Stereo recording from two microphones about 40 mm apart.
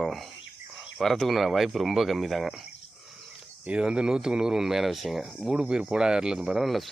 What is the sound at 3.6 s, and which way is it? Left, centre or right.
Speech, right.